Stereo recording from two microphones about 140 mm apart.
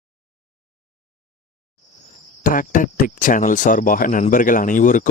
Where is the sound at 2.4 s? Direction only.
75° left (ahead or behind).